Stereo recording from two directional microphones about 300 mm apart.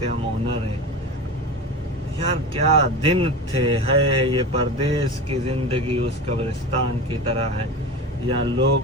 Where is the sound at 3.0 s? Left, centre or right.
Centre.